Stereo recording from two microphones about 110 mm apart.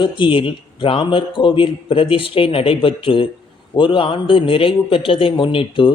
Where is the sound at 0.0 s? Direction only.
50° left (ahead or behind).